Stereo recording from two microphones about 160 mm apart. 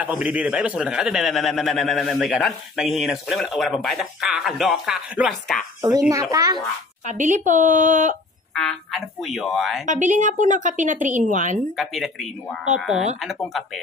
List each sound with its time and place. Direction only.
0.0 s a man's voice: 5° right (ahead or behind)
5.8 s a child's voice: 20° right (ahead or behind)
7.1 s a woman's voice: 50° right (ahead or behind)
8.5 s a man's voice: centre (ahead or behind)
9.8 s a woman's voice: 50° right (ahead or behind)
11.7 s a man's voice: centre (ahead or behind)